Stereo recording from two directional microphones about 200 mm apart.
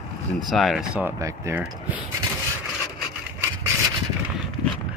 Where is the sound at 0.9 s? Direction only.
10° right (ahead or behind).